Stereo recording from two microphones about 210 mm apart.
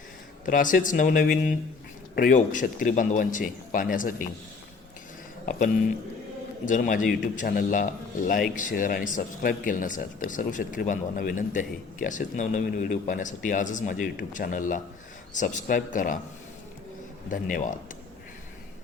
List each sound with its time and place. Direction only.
0.4 s speech: 40° left (ahead or behind)
5.5 s speech: 35° left (ahead or behind)
17.2 s speech: 40° left (ahead or behind)